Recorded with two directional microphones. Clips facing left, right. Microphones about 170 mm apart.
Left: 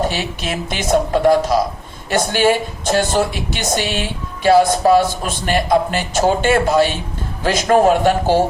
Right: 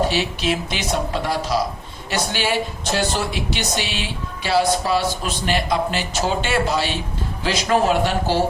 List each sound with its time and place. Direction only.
0.1 s a man's voice: 50° left (ahead or behind)